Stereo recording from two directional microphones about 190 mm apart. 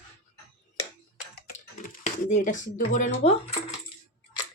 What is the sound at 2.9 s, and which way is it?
Speech, 40° left (ahead or behind).